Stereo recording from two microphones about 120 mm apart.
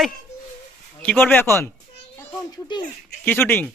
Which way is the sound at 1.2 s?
15° left (ahead or behind).